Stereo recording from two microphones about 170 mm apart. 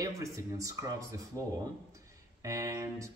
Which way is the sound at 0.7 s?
20° right (ahead or behind).